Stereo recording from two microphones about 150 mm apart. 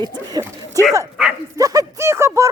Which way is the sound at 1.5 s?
20° right (ahead or behind).